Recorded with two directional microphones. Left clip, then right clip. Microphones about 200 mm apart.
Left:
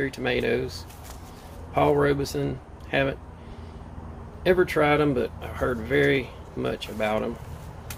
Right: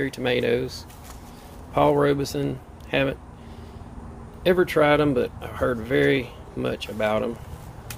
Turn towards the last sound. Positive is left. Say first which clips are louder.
# right 2 dB
turn(degrees=-25)  # may be behind; listen again after turning